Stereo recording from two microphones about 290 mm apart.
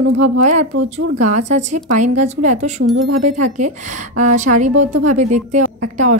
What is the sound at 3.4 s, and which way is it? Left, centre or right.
A woman's voice, right.